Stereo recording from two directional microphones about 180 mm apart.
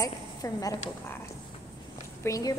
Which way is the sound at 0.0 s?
20° left (ahead or behind).